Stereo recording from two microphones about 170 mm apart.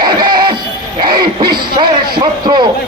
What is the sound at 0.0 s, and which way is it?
Music, 25° right (ahead or behind).